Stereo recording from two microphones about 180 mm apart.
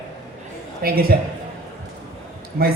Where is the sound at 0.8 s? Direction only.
55° right (ahead or behind).